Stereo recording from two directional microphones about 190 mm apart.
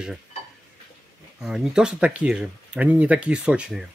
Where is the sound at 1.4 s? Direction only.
5° right (ahead or behind).